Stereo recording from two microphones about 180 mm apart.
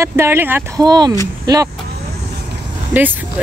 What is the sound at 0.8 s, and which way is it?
Speech, 25° right (ahead or behind).